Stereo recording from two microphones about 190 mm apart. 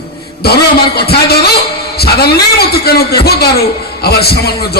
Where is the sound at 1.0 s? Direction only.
55° left (ahead or behind).